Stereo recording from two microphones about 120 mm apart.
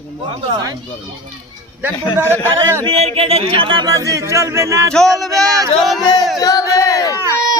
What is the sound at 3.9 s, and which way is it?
Speech, 25° right (ahead or behind).